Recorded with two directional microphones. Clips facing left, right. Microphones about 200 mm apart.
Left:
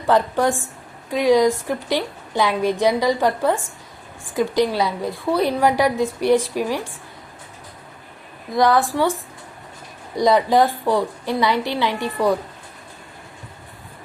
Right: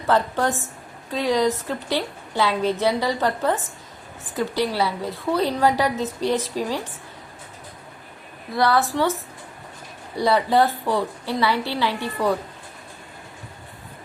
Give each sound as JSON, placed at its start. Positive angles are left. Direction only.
{"t": 0.1, "sound": "a woman's voice", "side_deg": 15}
{"t": 8.5, "sound": "a woman's voice", "side_deg": 15}